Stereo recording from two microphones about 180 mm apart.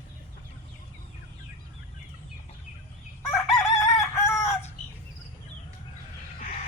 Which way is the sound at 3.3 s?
15° left (ahead or behind).